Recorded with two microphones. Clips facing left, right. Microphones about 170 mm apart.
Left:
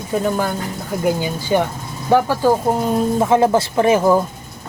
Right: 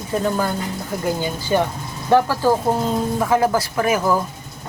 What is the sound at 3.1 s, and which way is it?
Speech, 25° left (ahead or behind).